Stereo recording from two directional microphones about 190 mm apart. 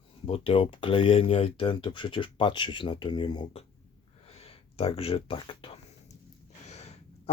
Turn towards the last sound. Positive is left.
turn(degrees=35)  # may be behind; listen again after turning